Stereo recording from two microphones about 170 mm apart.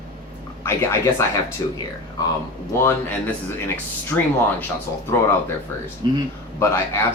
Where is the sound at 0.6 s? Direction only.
15° left (ahead or behind).